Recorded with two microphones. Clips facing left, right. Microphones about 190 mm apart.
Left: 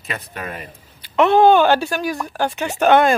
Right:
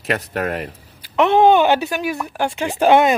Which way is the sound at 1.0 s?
15° right (ahead or behind).